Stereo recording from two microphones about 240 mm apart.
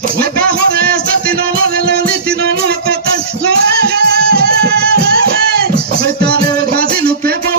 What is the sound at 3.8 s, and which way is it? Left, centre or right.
Music, right.